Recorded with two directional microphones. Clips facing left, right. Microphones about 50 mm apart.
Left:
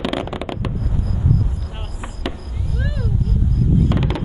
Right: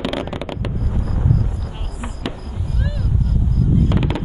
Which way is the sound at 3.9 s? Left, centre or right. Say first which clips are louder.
Right 1 dB; centre.